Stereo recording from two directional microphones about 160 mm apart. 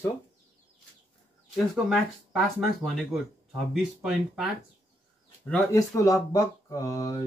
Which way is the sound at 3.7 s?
5° right (ahead or behind).